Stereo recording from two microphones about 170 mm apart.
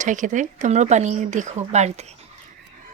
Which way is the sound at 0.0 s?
50° right (ahead or behind).